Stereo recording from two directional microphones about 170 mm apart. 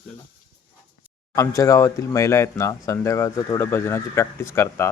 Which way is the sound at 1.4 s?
20° left (ahead or behind).